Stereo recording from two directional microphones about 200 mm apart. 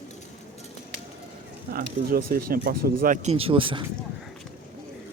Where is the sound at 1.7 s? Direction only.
50° right (ahead or behind); by 3.8 s 25° right (ahead or behind).